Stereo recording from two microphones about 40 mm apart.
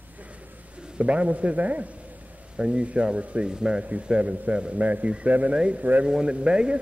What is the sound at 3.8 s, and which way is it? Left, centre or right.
A man's voice, right.